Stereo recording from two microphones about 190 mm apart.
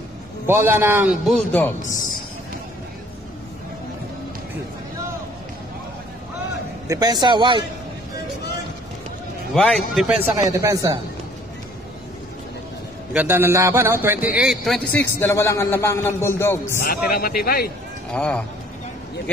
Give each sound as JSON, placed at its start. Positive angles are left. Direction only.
{"t": 0.5, "sound": "a man's voice", "side_deg": -10}
{"t": 1.2, "sound": "a man's voice", "side_deg": 5}
{"t": 6.9, "sound": "a man's voice", "side_deg": -20}
{"t": 9.5, "sound": "a man's voice", "side_deg": 0}
{"t": 13.1, "sound": "a man's voice", "side_deg": -10}
{"t": 17.1, "sound": "speech", "side_deg": 50}
{"t": 18.1, "sound": "a man's voice", "side_deg": 5}